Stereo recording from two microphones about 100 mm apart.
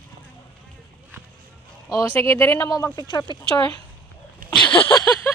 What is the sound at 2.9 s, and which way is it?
Speech, 45° left (ahead or behind).